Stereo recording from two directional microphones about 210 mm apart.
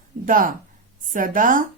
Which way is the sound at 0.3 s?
40° right (ahead or behind).